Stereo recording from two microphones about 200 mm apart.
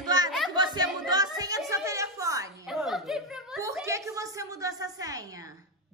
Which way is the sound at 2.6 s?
Centre (ahead or behind).